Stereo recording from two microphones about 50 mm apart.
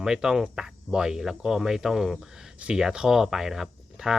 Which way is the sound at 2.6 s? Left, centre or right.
Right.